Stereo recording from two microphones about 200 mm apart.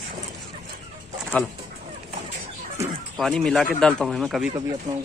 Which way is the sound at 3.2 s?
Centre (ahead or behind).